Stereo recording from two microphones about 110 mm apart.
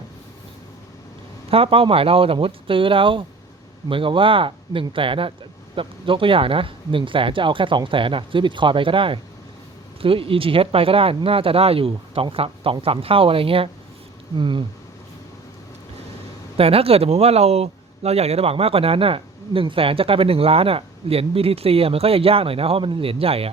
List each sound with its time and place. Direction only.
1.5 s speech: 60° right (ahead or behind)
14.3 s speech: 45° right (ahead or behind)
16.6 s speech: 60° right (ahead or behind)